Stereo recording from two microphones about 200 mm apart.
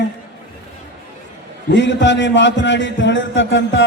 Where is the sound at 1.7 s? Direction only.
65° left (ahead or behind).